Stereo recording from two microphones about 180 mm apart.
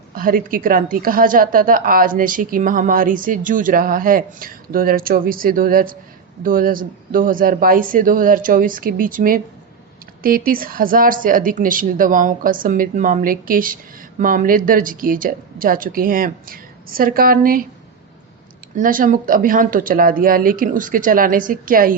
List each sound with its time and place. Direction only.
0.1 s a woman's voice: 50° right (ahead or behind)
18.8 s a woman's voice: 50° right (ahead or behind)